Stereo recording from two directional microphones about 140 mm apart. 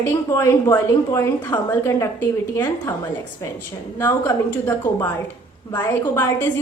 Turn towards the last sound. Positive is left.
turn(degrees=15)  # may be behind; listen again after turning